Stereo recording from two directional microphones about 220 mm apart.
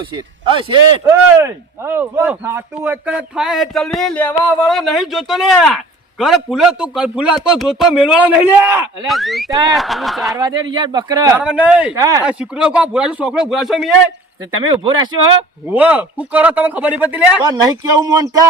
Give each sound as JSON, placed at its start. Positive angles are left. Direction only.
{"t": 0.0, "sound": "speech", "side_deg": -20}
{"t": 1.0, "sound": "speech", "side_deg": -10}
{"t": 9.0, "sound": "speech", "side_deg": 0}
{"t": 9.5, "sound": "speech", "side_deg": -15}
{"t": 9.7, "sound": "speech", "side_deg": 0}
{"t": 10.3, "sound": "speech", "side_deg": -20}
{"t": 12.2, "sound": "speech", "side_deg": -5}
{"t": 15.6, "sound": "speech", "side_deg": -5}